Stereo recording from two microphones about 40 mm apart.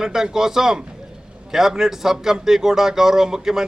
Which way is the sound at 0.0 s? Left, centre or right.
Centre.